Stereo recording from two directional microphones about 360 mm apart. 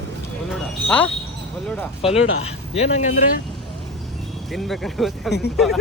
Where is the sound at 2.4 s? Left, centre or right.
Centre.